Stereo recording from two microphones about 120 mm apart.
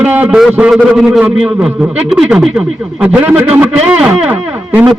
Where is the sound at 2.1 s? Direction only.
5° right (ahead or behind).